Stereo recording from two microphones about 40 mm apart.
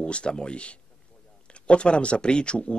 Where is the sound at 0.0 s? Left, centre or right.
Left.